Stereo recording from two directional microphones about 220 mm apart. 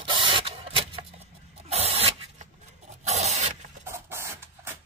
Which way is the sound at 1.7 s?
30° right (ahead or behind).